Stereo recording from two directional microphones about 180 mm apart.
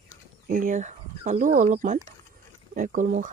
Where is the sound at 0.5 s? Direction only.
45° right (ahead or behind).